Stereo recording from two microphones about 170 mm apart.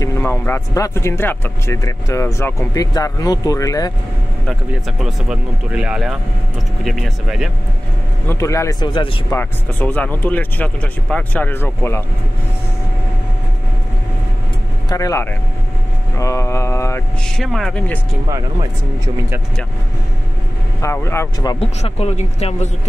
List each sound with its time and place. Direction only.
0.0 s speech: 15° left (ahead or behind)
4.5 s speech: centre (ahead or behind)
8.3 s speech: 15° left (ahead or behind)
9.4 s speech: 10° left (ahead or behind)
14.9 s speech: 20° left (ahead or behind)
16.2 s mantra: 15° left (ahead or behind)
17.4 s speech: centre (ahead or behind)
20.8 s speech: 15° left (ahead or behind)
21.5 s speech: 35° left (ahead or behind)